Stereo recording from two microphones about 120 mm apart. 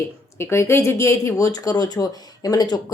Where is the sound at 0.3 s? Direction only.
20° left (ahead or behind).